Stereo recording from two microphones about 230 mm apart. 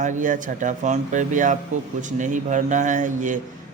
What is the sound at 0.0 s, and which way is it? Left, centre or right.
Speech, right.